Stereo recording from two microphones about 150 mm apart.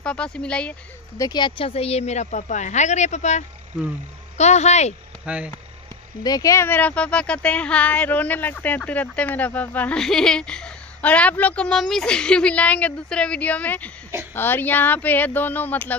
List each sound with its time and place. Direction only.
0.0 s speech: 5° left (ahead or behind)
1.1 s speech: 25° left (ahead or behind); by 4.9 s 50° left (ahead or behind)
5.2 s speech: 10° right (ahead or behind)
6.2 s speech: 25° left (ahead or behind)